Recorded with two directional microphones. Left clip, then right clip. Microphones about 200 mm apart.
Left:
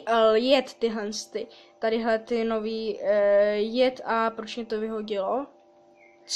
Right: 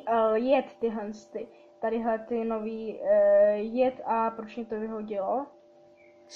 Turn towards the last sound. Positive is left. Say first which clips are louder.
# left 2 dB
turn(degrees=40)  # may be behind; listen again after turning